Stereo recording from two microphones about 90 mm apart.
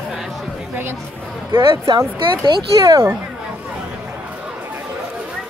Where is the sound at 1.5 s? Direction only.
50° right (ahead or behind).